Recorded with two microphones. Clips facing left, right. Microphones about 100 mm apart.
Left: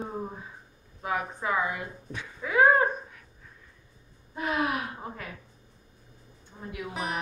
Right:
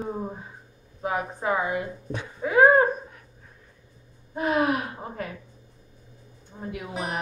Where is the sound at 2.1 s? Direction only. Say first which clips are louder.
Right 5 dB; 35° right (ahead or behind).